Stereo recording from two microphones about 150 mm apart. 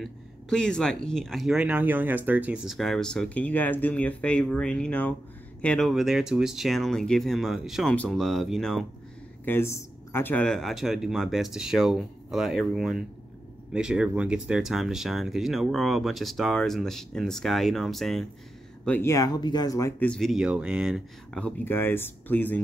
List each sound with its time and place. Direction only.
0.0 s speech: 5° left (ahead or behind)
9.4 s speech: 15° left (ahead or behind)
18.9 s speech: 15° left (ahead or behind)
20.0 s speech: 5° left (ahead or behind)
21.4 s speech: 10° left (ahead or behind)